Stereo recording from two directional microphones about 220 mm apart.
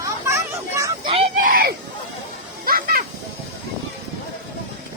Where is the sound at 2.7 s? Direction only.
40° right (ahead or behind).